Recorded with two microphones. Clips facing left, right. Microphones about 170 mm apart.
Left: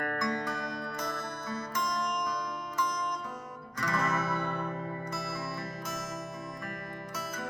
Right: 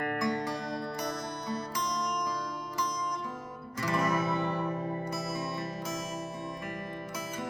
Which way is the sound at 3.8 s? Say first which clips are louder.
Right 2 dB; 20° right (ahead or behind).